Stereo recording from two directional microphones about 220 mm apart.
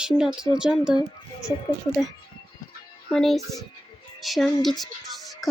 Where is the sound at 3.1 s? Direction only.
Centre (ahead or behind).